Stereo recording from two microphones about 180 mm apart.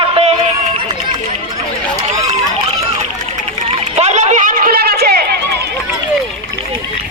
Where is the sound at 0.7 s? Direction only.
25° right (ahead or behind).